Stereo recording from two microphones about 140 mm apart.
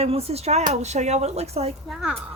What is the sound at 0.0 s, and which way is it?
Speech, 45° right (ahead or behind).